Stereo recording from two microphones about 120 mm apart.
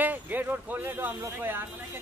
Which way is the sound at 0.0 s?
15° right (ahead or behind).